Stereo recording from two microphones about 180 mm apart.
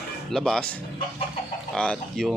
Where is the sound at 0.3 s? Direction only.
5° left (ahead or behind).